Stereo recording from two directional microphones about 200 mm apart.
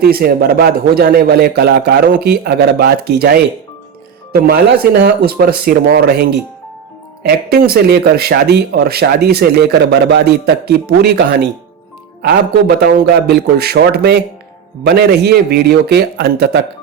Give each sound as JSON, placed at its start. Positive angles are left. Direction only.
{"t": 0.0, "sound": "speech", "side_deg": -50}
{"t": 7.2, "sound": "a man's voice", "side_deg": -50}